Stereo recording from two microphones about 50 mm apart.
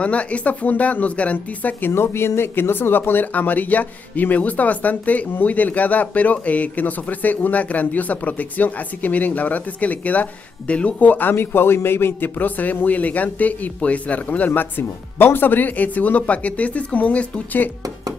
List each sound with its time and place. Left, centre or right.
0.0 s speech: left
1.9 s speech: left